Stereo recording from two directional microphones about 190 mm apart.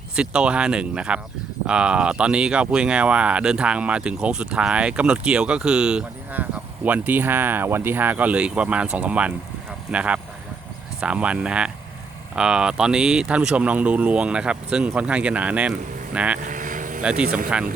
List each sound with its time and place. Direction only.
0.2 s speech: 5° right (ahead or behind)
16.4 s vehicle: 40° right (ahead or behind)
17.0 s speech: 5° right (ahead or behind)